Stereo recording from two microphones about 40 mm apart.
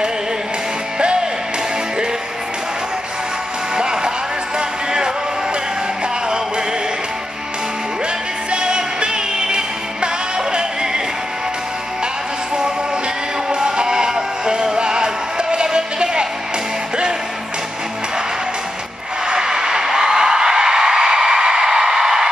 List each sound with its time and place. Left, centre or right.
3.7 s music: centre
8.5 s music: right
13.5 s music: centre
19.2 s a sound: centre